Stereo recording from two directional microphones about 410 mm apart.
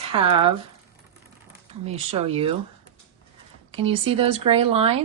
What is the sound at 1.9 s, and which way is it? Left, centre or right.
Speech, centre.